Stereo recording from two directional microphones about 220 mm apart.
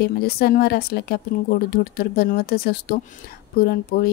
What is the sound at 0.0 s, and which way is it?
Speech, 45° left (ahead or behind).